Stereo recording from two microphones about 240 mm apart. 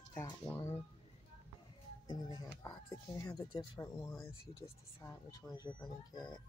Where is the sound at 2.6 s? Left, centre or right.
Centre.